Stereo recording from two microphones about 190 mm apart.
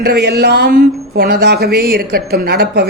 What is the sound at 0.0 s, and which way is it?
Speech, 55° right (ahead or behind).